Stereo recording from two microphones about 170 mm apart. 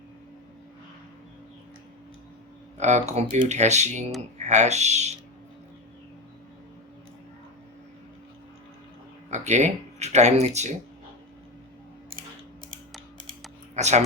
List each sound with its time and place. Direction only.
2.7 s speech: 40° right (ahead or behind)
9.3 s speech: 45° right (ahead or behind)
13.7 s speech: 40° right (ahead or behind)